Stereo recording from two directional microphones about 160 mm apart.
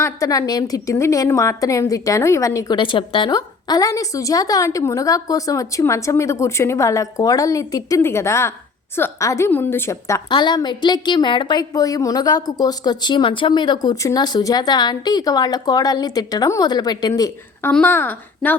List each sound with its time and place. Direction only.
0.0 s a woman's voice: 20° left (ahead or behind)
10.2 s a woman's voice: 25° left (ahead or behind)
17.7 s a woman's voice: 10° left (ahead or behind)